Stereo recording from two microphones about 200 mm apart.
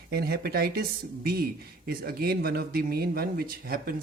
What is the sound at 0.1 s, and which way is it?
Speech, 50° right (ahead or behind).